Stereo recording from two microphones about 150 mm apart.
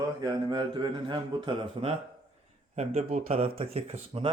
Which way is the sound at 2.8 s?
45° right (ahead or behind).